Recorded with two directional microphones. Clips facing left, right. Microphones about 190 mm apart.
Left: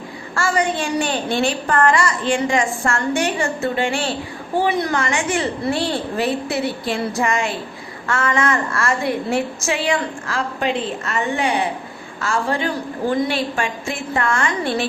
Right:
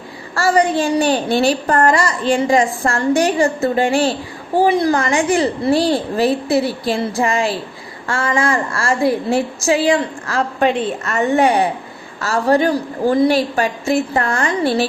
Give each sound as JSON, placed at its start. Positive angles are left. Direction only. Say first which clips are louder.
{"t": 0.3, "sound": "a woman's voice", "louder": "right 5 dB", "side_deg": -35}